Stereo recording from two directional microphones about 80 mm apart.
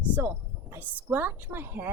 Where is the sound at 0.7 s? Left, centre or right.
Right.